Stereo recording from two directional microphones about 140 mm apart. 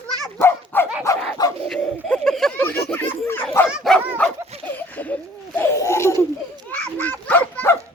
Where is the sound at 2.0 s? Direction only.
5° left (ahead or behind).